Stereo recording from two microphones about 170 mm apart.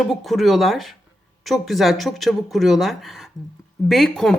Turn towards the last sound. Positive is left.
turn(degrees=0)  # may be behind; listen again after turning